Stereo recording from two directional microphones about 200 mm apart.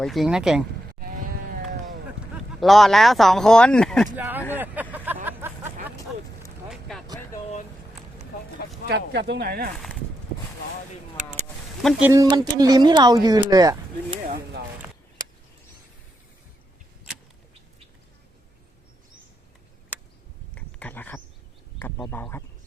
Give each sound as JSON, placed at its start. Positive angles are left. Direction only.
{"t": 0.0, "sound": "speech", "side_deg": 0}
{"t": 0.9, "sound": "sheep", "side_deg": -45}
{"t": 2.6, "sound": "speech", "side_deg": 0}
{"t": 4.5, "sound": "vehicle", "side_deg": -10}
{"t": 6.7, "sound": "a sound", "side_deg": 0}
{"t": 8.9, "sound": "speech", "side_deg": -55}
{"t": 11.8, "sound": "speech", "side_deg": 0}
{"t": 12.0, "sound": "speech", "side_deg": -15}
{"t": 14.3, "sound": "a sound", "side_deg": -45}
{"t": 20.6, "sound": "a sound", "side_deg": 5}